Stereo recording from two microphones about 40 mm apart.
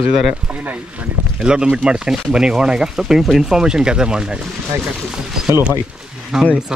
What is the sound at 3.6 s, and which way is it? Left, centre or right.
Speech, centre.